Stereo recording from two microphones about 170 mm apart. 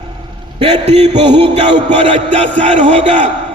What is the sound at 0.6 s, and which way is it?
Music, 40° right (ahead or behind).